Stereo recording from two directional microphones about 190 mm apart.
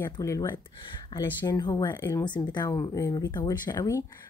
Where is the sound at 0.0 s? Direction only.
15° left (ahead or behind).